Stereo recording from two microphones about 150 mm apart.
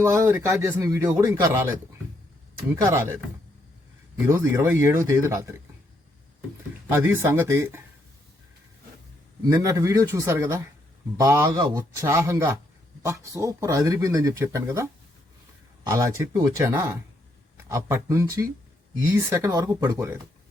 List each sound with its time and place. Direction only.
0.0 s speech: 20° right (ahead or behind)
4.3 s speech: 20° right (ahead or behind)
6.8 s speech: 15° right (ahead or behind)
9.5 s speech: 20° right (ahead or behind)